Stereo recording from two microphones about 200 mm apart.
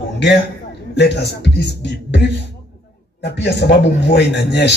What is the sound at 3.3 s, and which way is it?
Speech, 55° left (ahead or behind).